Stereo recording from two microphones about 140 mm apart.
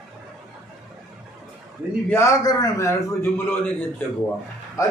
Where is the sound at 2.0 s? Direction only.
20° left (ahead or behind).